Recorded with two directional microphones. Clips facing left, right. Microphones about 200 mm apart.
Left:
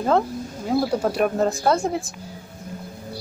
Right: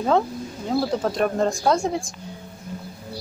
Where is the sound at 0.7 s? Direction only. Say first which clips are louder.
Left 1 dB; 10° left (ahead or behind).